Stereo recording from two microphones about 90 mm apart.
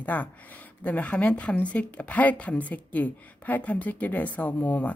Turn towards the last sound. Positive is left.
turn(degrees=15)  # may be behind; listen again after turning